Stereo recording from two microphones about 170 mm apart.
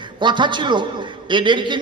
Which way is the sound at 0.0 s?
25° right (ahead or behind).